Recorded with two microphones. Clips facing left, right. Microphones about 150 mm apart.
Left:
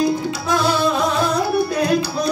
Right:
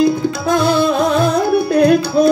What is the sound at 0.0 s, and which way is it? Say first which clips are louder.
Music: right 5 dB; 55° right (ahead or behind).